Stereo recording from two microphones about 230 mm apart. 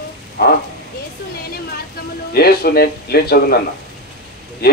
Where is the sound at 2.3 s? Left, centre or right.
Left.